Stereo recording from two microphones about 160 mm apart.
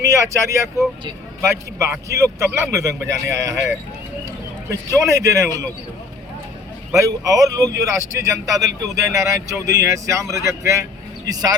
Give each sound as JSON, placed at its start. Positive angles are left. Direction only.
{"t": 0.1, "sound": "a man's voice", "side_deg": -20}
{"t": 4.7, "sound": "a man's voice", "side_deg": -20}
{"t": 6.9, "sound": "a man's voice", "side_deg": -20}